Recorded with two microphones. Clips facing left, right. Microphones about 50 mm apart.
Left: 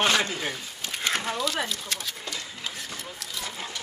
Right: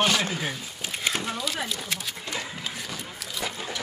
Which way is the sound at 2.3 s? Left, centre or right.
Right.